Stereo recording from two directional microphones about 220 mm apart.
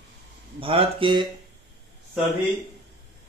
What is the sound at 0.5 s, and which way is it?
Speech, 25° right (ahead or behind).